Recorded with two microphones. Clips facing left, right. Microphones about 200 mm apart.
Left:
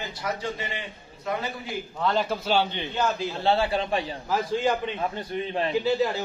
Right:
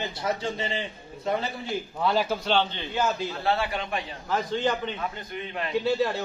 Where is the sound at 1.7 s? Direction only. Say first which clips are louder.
Right 1 dB; 5° right (ahead or behind).